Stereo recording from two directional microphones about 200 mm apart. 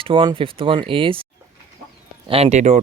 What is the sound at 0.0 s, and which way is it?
Speech, 25° right (ahead or behind).